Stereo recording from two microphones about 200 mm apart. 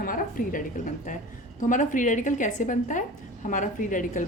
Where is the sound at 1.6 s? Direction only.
40° left (ahead or behind).